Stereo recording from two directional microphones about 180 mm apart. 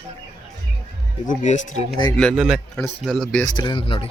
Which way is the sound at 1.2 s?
45° left (ahead or behind).